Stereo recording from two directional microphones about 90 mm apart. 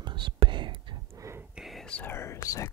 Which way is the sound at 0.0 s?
60° right (ahead or behind).